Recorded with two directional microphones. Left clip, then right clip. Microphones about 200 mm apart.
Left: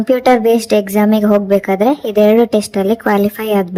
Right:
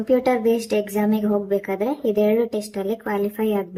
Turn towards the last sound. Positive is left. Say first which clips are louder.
# left 8 dB
turn(degrees=45)  # may be behind; listen again after turning